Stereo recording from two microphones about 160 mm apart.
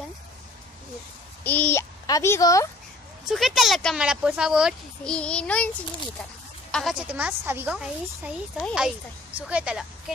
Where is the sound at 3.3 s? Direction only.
Centre (ahead or behind).